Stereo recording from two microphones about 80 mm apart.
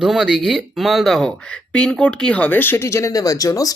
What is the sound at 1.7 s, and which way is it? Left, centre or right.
Speech, centre.